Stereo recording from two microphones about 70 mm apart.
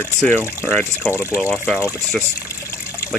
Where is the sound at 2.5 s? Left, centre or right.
Left.